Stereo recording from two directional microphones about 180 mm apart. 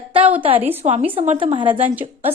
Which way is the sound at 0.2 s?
10° right (ahead or behind).